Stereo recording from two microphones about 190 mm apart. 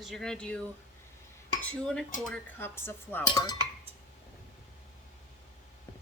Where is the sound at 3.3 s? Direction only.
20° left (ahead or behind).